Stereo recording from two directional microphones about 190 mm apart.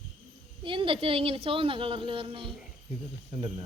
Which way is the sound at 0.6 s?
25° right (ahead or behind).